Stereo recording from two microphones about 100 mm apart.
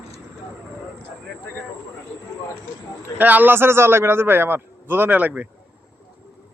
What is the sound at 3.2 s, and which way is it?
A man's voice, 20° right (ahead or behind).